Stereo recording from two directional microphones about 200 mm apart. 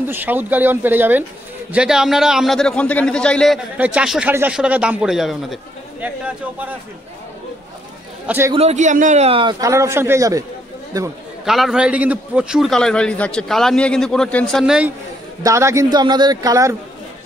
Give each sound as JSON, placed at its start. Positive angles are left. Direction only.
{"t": 0.1, "sound": "a man's voice", "side_deg": -10}
{"t": 8.3, "sound": "a man's voice", "side_deg": -10}
{"t": 8.5, "sound": "a man's voice", "side_deg": -35}
{"t": 11.4, "sound": "a man's voice", "side_deg": 0}
{"t": 15.4, "sound": "a man's voice", "side_deg": -15}